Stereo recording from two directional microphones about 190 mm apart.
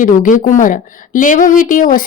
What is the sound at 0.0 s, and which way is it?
A woman's voice, 45° left (ahead or behind).